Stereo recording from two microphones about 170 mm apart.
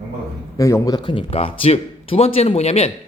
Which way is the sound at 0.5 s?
20° left (ahead or behind).